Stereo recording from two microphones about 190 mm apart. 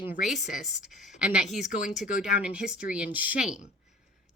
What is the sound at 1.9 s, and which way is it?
A woman's voice, centre (ahead or behind).